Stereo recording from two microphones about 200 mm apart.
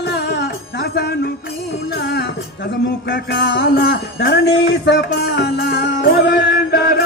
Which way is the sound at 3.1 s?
60° left (ahead or behind).